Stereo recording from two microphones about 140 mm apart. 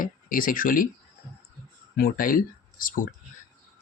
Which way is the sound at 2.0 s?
90° left.